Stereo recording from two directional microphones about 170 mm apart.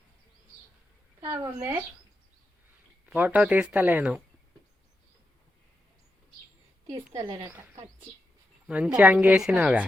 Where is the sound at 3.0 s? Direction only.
10° right (ahead or behind).